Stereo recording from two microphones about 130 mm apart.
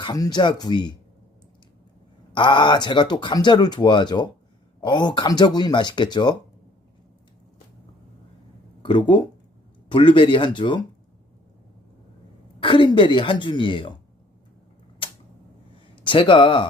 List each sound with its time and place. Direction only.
0.0 s speech: 30° left (ahead or behind)
2.3 s speech: 35° left (ahead or behind)
8.8 s speech: 40° left (ahead or behind)
12.5 s speech: 40° left (ahead or behind)
15.0 s camera: 40° left (ahead or behind)
16.0 s speech: 40° left (ahead or behind)